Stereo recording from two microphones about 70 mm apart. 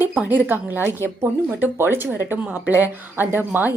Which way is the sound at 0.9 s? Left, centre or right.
Left.